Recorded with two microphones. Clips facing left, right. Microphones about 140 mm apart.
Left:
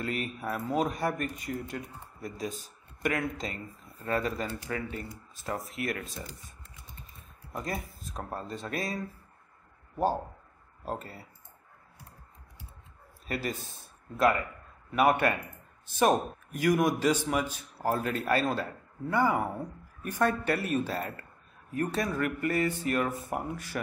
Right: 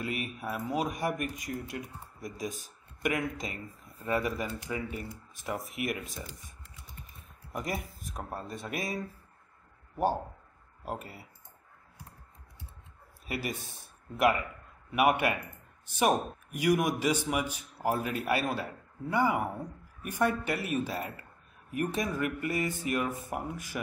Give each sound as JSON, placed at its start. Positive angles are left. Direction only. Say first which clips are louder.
{"t": 0.0, "sound": "speech", "louder": "left 2 dB", "side_deg": -10}
{"t": 7.5, "sound": "speech", "louder": "even", "side_deg": -15}
{"t": 10.9, "sound": "speech", "louder": "left 2 dB", "side_deg": -10}
{"t": 13.3, "sound": "speech", "louder": "left 2 dB", "side_deg": -10}